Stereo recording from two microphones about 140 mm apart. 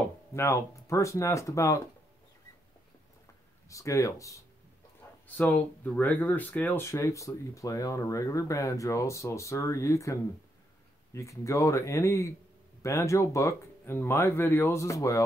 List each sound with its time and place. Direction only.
0.3 s speech: 20° left (ahead or behind)
3.6 s speech: 20° left (ahead or behind)
5.4 s speech: 10° left (ahead or behind)
11.1 s speech: 20° left (ahead or behind)